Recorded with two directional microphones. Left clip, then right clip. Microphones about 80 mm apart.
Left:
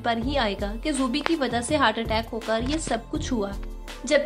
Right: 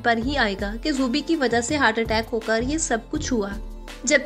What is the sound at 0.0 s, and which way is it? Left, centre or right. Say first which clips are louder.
A woman's voice: right 3 dB; right.